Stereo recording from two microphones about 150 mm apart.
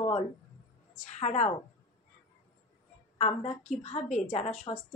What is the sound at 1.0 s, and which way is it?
Speech, 50° left (ahead or behind).